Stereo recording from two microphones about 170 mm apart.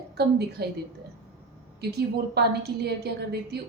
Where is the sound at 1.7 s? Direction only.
75° right (ahead or behind).